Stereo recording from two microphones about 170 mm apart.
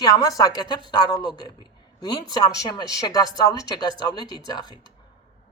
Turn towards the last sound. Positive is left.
turn(degrees=25)  # may be behind; listen again after turning